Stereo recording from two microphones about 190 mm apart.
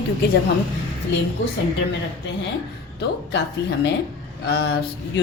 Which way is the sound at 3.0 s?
65° left (ahead or behind).